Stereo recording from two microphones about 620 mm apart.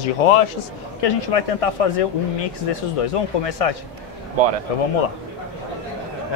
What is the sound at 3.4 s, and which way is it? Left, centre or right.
A man's voice, left.